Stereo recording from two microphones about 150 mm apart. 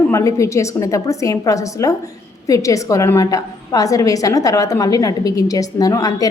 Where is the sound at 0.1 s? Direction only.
20° left (ahead or behind).